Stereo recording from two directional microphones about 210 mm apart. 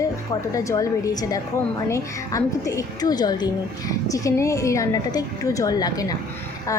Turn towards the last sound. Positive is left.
turn(degrees=20)  # may be behind; listen again after turning